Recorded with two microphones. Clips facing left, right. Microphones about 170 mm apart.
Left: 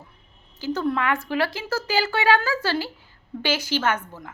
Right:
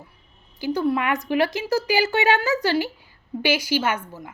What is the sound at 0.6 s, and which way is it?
Speech, 15° right (ahead or behind).